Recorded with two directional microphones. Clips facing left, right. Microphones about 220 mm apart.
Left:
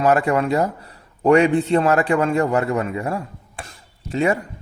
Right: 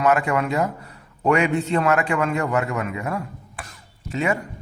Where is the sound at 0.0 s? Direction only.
35° left (ahead or behind).